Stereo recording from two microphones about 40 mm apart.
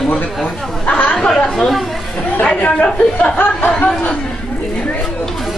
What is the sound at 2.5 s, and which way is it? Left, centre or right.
Speech, left.